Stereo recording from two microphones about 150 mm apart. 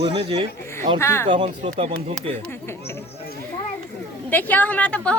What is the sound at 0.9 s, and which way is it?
Speech, 15° left (ahead or behind).